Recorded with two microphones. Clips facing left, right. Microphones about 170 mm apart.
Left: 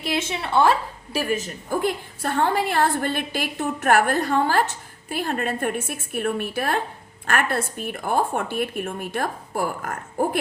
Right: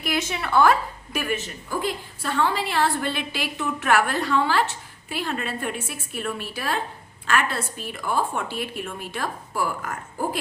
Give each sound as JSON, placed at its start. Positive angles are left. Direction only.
{"t": 0.0, "sound": "a woman's voice", "side_deg": 25}
{"t": 1.7, "sound": "a woman's voice", "side_deg": 50}